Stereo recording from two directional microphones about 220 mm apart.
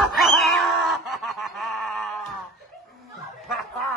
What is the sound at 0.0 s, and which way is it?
Snicker, centre (ahead or behind).